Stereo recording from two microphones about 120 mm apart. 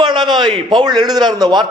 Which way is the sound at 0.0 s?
40° right (ahead or behind).